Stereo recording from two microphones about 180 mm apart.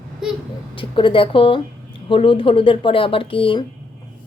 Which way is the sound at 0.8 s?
30° left (ahead or behind).